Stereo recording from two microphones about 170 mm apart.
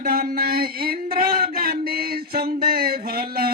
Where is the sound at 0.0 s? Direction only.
60° right (ahead or behind).